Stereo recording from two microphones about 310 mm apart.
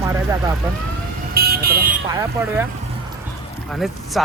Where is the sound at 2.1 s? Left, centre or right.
Centre.